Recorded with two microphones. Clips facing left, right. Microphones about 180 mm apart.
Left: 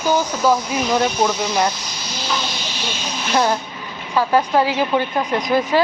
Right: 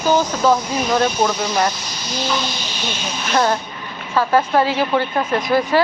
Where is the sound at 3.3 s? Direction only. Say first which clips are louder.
Even; 15° left (ahead or behind).